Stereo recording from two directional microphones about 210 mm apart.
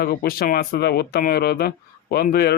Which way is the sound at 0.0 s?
50° left (ahead or behind).